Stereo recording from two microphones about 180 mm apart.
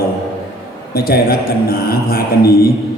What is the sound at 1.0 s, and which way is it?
A man's voice, 55° left (ahead or behind).